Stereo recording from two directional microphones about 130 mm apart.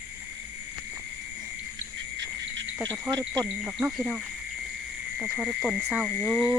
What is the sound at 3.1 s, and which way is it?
Speech, 30° right (ahead or behind).